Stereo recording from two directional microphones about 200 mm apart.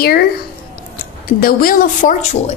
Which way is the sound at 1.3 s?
45° left (ahead or behind).